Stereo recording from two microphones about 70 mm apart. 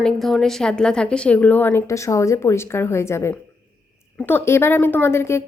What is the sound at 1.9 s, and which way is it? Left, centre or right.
A woman's voice, left.